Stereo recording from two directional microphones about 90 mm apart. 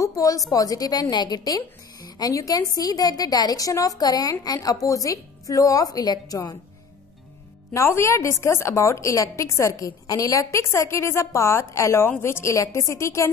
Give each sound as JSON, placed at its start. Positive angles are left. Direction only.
{"t": 0.0, "sound": "a sound", "side_deg": 40}
{"t": 0.5, "sound": "a woman's voice", "side_deg": 40}
{"t": 7.7, "sound": "a woman's voice", "side_deg": 30}